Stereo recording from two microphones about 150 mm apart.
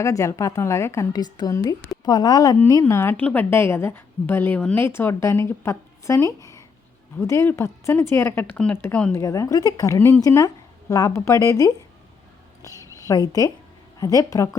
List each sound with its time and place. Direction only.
0.0 s a woman's voice: 20° left (ahead or behind)
9.2 s a woman's voice: 20° left (ahead or behind)
12.8 s a sound: 20° left (ahead or behind)
14.0 s a woman's voice: 25° left (ahead or behind)